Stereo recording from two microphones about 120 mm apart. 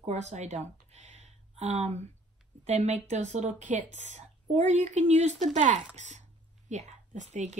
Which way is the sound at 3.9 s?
70° right (ahead or behind).